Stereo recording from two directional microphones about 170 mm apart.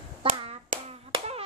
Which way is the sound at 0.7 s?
50° right (ahead or behind).